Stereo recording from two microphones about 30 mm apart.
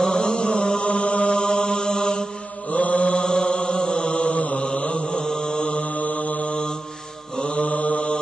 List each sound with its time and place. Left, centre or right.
0.0 s chant: left
1.4 s mantra: left
2.7 s mantra: left
3.3 s chant: left
4.1 s mantra: left
5.0 s mantra: centre
5.6 s mantra: left
7.3 s mantra: left
7.6 s mantra: left